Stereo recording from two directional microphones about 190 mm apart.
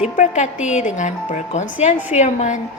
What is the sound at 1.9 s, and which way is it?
Speech, 10° right (ahead or behind).